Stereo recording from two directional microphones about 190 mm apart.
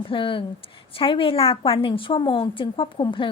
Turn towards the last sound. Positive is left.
turn(degrees=25)  # may be behind; listen again after turning